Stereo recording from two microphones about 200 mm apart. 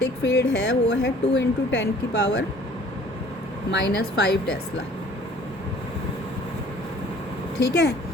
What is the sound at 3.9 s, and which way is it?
Speech, 50° left (ahead or behind).